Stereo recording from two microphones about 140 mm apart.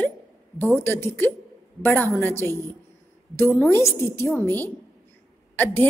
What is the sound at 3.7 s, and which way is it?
A woman's voice, 15° left (ahead or behind).